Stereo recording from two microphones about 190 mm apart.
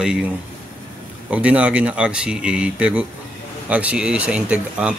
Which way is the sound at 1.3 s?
5° right (ahead or behind).